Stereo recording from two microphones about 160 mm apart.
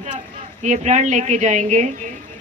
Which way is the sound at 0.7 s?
50° right (ahead or behind).